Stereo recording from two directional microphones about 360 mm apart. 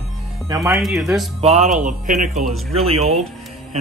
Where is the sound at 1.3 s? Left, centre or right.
Centre.